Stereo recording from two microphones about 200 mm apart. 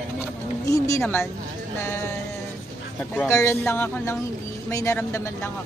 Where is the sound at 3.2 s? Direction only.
15° left (ahead or behind).